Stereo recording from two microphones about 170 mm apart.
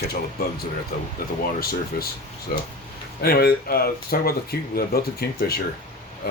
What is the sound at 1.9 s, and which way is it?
Speech, 65° left (ahead or behind).